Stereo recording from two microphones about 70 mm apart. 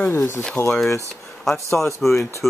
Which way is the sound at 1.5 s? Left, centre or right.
Left.